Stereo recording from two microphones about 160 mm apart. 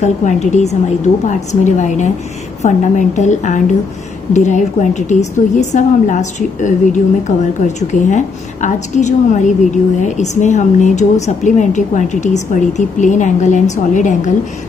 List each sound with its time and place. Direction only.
0.0 s a woman's voice: 45° left (ahead or behind)